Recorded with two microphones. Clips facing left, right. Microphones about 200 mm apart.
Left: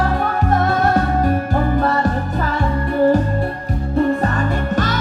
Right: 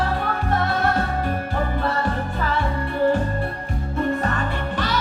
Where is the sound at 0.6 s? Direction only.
45° left (ahead or behind).